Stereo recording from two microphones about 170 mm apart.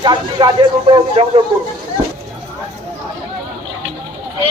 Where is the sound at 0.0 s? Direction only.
25° right (ahead or behind).